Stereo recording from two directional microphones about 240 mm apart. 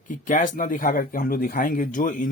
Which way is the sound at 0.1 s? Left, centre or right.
Left.